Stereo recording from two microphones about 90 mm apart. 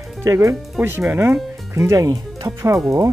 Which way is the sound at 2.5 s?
15° right (ahead or behind).